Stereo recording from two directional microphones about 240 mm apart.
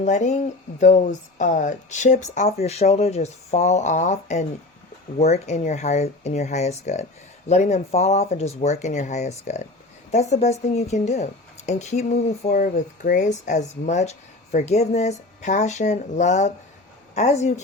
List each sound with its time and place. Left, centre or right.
0.0 s speech: left